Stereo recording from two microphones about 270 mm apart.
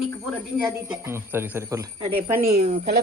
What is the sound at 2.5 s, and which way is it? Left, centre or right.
Speech, right.